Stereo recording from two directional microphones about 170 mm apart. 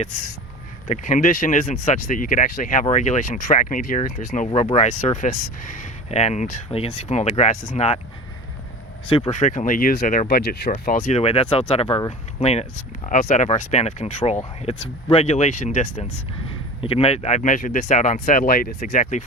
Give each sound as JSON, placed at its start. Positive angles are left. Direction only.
{"t": 0.9, "sound": "speech", "side_deg": 45}
{"t": 4.4, "sound": "speech", "side_deg": 35}
{"t": 9.0, "sound": "speech", "side_deg": 30}
{"t": 9.3, "sound": "speech", "side_deg": 45}
{"t": 13.1, "sound": "speech", "side_deg": 50}